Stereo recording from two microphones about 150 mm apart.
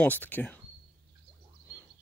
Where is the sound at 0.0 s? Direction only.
10° left (ahead or behind).